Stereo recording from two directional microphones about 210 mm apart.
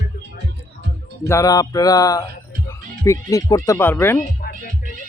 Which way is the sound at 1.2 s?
15° left (ahead or behind).